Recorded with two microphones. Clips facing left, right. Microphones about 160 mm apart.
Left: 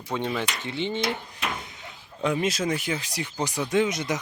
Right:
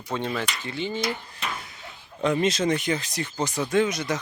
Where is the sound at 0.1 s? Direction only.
15° left (ahead or behind).